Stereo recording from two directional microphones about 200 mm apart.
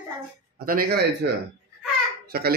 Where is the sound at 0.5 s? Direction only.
45° right (ahead or behind).